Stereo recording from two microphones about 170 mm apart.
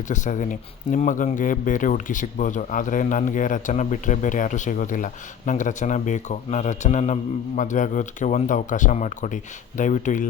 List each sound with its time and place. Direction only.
0.1 s speech: 45° left (ahead or behind)